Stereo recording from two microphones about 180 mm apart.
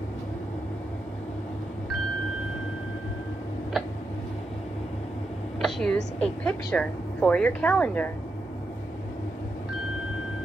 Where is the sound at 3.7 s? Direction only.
Centre (ahead or behind).